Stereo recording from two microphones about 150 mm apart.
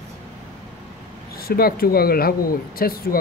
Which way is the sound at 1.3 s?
90° left.